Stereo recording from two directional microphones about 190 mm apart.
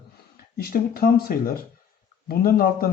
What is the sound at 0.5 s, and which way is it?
Speech, 50° left (ahead or behind).